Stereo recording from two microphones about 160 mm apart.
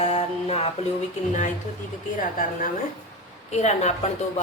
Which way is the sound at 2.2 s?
60° left (ahead or behind).